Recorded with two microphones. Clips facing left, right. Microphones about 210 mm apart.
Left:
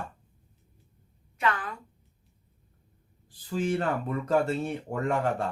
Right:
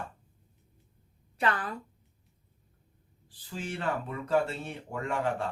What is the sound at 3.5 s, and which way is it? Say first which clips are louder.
Speech: left 6 dB; 45° left (ahead or behind).